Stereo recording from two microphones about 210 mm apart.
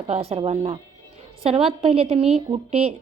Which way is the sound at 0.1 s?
30° right (ahead or behind).